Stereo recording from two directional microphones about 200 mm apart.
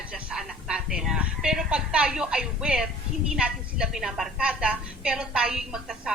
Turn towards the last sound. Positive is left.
turn(degrees=-5)  # may be behind; listen again after turning